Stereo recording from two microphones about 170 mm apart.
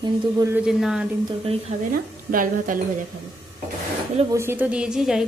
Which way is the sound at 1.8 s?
55° right (ahead or behind).